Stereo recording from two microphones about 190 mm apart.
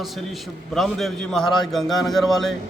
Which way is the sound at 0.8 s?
Centre (ahead or behind).